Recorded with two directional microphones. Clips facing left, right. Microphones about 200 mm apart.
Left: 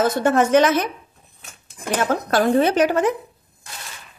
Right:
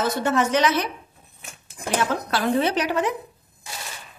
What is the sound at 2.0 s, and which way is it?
Speech, 50° left (ahead or behind).